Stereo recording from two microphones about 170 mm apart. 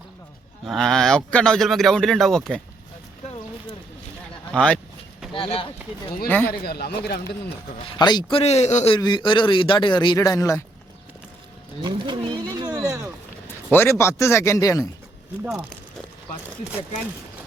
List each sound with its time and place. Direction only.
0.7 s speech: centre (ahead or behind)
4.5 s speech: 5° left (ahead or behind)
5.3 s a man's voice: 30° left (ahead or behind)
6.2 s speech: 10° left (ahead or behind)
6.5 s speech: 65° left (ahead or behind)
7.9 s a man's voice: 25° left (ahead or behind)
9.0 s speech: 25° left (ahead or behind)
11.8 s speech: 25° right (ahead or behind)
12.8 s a sound: 15° right (ahead or behind)
13.7 s speech: 15° left (ahead or behind)
15.4 s speech: centre (ahead or behind)